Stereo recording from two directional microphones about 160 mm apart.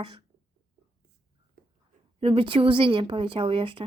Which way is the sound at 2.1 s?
35° right (ahead or behind).